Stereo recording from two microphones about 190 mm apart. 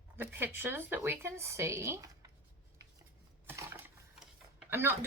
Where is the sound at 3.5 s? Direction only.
10° right (ahead or behind).